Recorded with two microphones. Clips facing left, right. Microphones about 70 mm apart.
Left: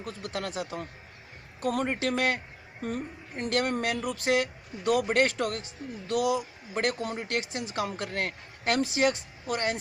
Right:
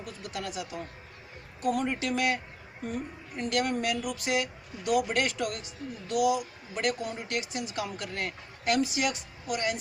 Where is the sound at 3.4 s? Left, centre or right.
Left.